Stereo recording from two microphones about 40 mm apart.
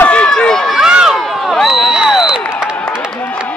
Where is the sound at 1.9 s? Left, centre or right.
Centre.